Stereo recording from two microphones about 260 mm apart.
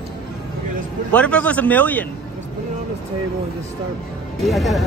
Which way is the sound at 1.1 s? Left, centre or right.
Centre.